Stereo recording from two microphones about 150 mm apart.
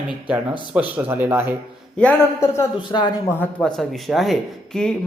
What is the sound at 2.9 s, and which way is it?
Speech, 30° left (ahead or behind).